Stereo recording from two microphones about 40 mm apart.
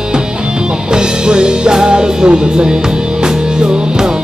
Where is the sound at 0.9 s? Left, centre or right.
Centre.